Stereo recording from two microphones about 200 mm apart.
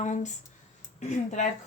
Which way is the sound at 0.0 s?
35° left (ahead or behind).